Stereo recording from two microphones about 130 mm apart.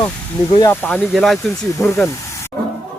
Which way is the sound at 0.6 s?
15° left (ahead or behind).